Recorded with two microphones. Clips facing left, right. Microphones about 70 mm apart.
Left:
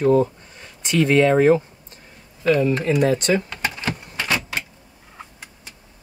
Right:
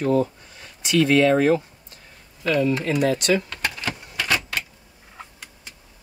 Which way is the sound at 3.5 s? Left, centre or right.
Centre.